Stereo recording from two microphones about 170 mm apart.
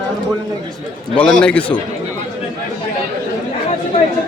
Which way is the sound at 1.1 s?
5° left (ahead or behind).